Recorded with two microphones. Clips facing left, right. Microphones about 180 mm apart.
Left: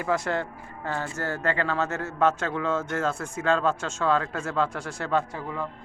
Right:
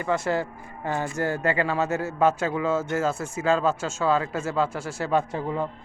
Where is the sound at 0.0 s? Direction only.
Centre (ahead or behind).